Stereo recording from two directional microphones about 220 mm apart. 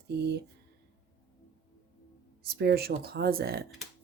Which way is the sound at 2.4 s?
45° right (ahead or behind).